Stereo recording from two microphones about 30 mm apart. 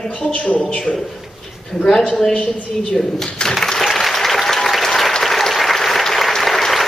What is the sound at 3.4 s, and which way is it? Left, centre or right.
Applause, centre.